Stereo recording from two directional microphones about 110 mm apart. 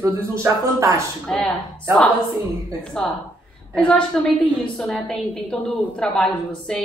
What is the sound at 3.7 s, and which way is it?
A woman's voice, 10° left (ahead or behind).